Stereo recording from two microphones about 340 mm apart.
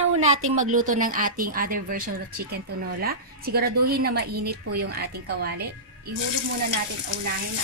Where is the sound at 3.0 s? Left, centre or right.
Right.